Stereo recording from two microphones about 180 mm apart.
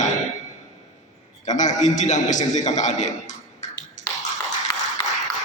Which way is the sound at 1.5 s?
40° left (ahead or behind).